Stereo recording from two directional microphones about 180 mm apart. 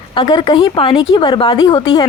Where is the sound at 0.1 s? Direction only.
25° left (ahead or behind).